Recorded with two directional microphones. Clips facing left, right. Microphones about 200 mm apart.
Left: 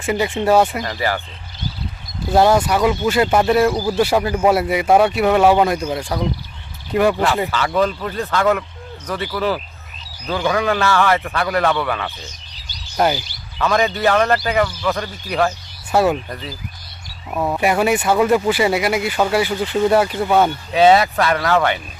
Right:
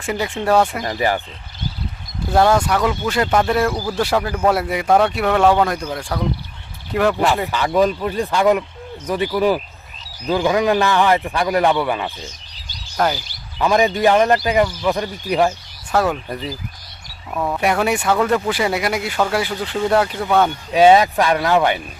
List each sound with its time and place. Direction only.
0.0 s speech: 5° left (ahead or behind)
0.8 s speech: 20° right (ahead or behind)
2.3 s speech: 5° left (ahead or behind)
7.5 s speech: 15° right (ahead or behind)
13.6 s speech: 15° right (ahead or behind)
15.9 s speech: 10° left (ahead or behind)
17.3 s speech: 15° left (ahead or behind)
17.6 s speech: centre (ahead or behind)
20.7 s speech: 15° right (ahead or behind)